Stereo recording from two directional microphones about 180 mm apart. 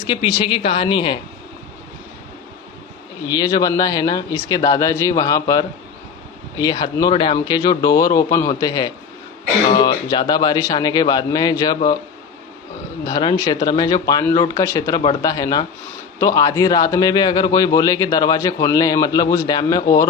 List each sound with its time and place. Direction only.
0.1 s a man's voice: 30° left (ahead or behind)
3.2 s a man's voice: 20° left (ahead or behind)
13.1 s a man's voice: 20° left (ahead or behind)